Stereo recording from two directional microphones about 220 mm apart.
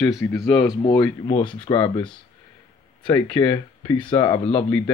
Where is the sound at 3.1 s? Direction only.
15° left (ahead or behind).